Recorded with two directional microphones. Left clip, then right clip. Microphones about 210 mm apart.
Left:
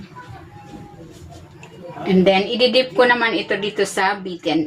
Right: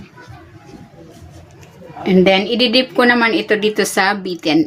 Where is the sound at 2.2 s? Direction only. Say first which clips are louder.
Left 1 dB; 50° right (ahead or behind).